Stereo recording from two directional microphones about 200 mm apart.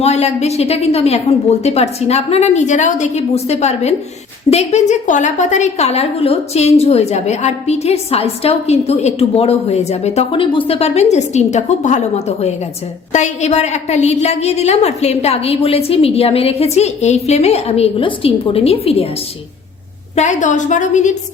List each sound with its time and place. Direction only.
0.0 s a woman's voice: 35° left (ahead or behind)
20.1 s a woman's voice: 35° left (ahead or behind)